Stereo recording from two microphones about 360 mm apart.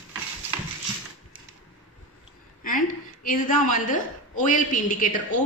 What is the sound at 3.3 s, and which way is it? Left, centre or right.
A woman's voice, left.